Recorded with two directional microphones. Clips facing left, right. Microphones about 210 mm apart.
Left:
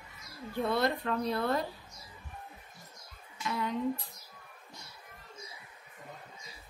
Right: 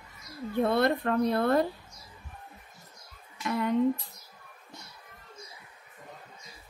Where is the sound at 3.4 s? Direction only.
55° right (ahead or behind).